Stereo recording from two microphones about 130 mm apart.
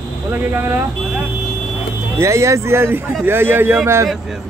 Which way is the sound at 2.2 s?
20° right (ahead or behind).